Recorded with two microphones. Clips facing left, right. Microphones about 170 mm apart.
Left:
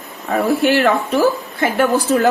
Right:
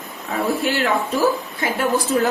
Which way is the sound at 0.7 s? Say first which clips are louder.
Left 5 dB; 65° left (ahead or behind).